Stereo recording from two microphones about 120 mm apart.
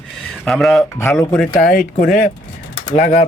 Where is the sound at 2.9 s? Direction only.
70° left (ahead or behind).